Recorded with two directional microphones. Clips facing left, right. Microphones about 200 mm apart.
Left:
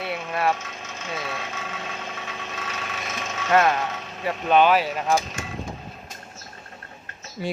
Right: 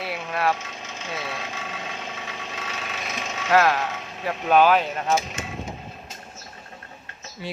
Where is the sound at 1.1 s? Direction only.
Centre (ahead or behind).